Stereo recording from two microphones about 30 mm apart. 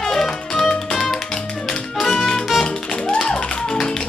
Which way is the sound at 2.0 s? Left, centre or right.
Left.